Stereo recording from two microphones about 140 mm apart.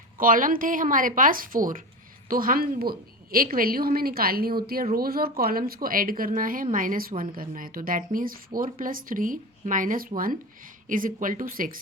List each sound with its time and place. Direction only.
0.2 s speech: 80° right
2.3 s a woman's voice: 90° right
10.8 s speech: 75° right (ahead or behind)